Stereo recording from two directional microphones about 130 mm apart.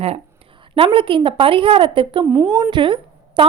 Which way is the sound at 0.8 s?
40° right (ahead or behind).